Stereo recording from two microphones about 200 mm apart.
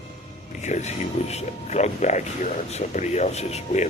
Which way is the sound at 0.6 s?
35° left (ahead or behind).